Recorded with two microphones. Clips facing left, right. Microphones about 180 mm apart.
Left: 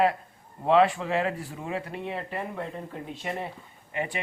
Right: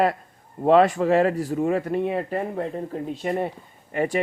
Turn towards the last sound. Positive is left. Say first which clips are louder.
# right 8 dB
turn(degrees=-45)  # may be behind; listen again after turning